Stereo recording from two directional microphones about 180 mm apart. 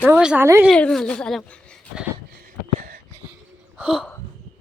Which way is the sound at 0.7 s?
5° left (ahead or behind).